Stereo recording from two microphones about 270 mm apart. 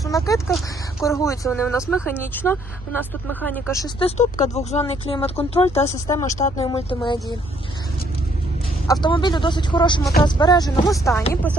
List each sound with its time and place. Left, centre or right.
0.0 s speech: centre
8.9 s speech: centre